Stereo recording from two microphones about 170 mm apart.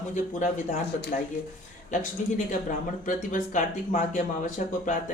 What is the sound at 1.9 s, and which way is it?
Speech, 50° left (ahead or behind).